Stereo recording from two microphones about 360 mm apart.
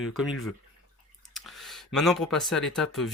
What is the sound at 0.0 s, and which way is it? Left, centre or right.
Speech, centre.